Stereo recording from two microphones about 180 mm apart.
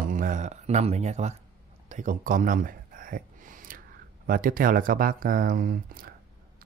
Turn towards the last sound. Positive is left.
turn(degrees=-55)  # may be behind; listen again after turning